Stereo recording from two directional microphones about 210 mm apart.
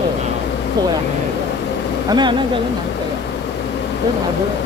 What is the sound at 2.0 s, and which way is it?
Speech, 20° right (ahead or behind).